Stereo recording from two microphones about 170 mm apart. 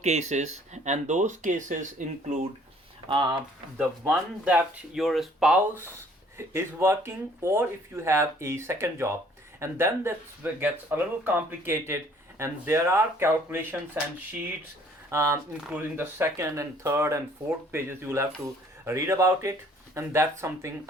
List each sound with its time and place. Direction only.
0.0 s speech: 40° right (ahead or behind)
3.8 s speech: 5° right (ahead or behind)
6.3 s speech: 15° right (ahead or behind)
15.1 s speech: 15° right (ahead or behind)